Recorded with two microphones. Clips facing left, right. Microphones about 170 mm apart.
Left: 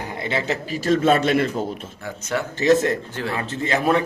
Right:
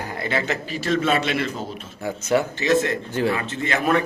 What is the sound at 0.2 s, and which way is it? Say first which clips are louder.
A man's voice: left 1 dB; 25° left (ahead or behind).